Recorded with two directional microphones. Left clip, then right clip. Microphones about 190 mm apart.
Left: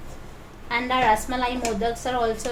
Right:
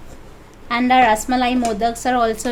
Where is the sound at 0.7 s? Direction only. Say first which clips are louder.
Right 7 dB; 60° right (ahead or behind).